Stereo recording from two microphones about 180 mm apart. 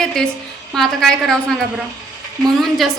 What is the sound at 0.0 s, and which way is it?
A woman's voice, 5° left (ahead or behind).